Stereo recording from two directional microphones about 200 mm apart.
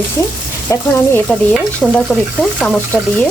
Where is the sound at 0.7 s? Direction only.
15° left (ahead or behind).